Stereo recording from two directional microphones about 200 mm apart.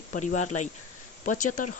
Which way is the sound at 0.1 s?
40° left (ahead or behind).